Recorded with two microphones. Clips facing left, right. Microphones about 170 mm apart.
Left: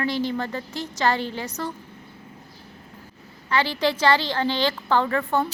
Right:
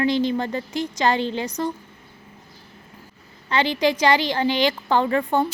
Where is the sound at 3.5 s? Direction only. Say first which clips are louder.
Right 2 dB; 20° right (ahead or behind).